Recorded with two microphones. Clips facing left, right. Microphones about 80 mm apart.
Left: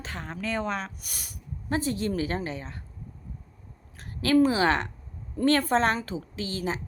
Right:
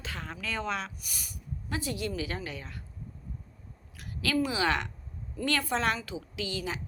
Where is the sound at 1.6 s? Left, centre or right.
Left.